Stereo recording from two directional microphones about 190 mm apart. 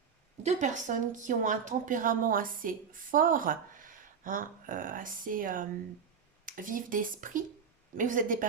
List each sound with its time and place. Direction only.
0.4 s speech: 40° right (ahead or behind)